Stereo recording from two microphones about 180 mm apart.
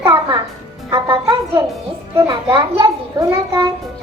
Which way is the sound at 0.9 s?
25° right (ahead or behind).